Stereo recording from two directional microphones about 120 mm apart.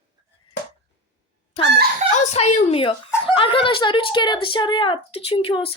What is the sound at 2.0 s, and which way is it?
Speech, 65° left (ahead or behind).